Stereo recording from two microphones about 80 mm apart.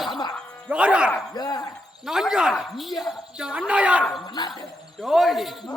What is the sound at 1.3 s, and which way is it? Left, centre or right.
Speech, left.